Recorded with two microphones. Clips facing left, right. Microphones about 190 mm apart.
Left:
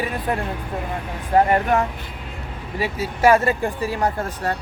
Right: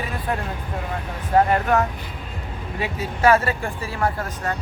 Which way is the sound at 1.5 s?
15° left (ahead or behind).